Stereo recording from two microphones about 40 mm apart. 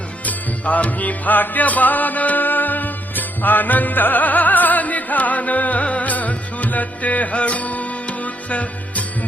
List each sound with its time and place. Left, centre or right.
0.3 s music: left